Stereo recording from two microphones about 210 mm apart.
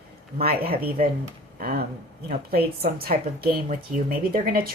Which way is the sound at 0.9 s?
45° right (ahead or behind).